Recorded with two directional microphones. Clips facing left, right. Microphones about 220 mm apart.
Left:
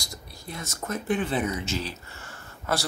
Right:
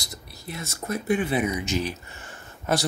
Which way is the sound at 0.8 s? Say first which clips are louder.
Right 3 dB; 10° right (ahead or behind).